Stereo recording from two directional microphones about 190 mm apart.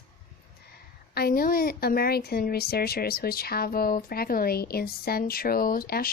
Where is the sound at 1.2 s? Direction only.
55° left (ahead or behind).